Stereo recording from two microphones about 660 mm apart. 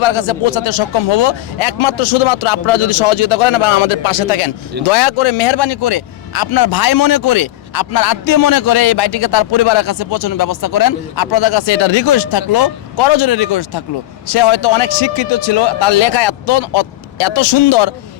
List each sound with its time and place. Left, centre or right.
0.0 s speech: left